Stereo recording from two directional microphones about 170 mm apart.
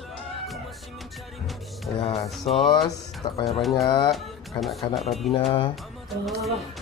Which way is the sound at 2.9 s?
20° left (ahead or behind).